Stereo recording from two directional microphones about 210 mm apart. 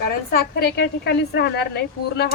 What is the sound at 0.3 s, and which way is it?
A woman's voice, 50° left (ahead or behind).